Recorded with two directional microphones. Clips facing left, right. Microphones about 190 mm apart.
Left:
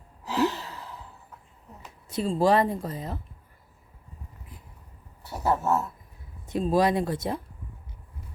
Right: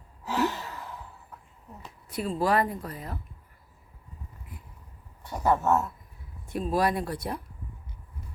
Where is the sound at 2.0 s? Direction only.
25° left (ahead or behind).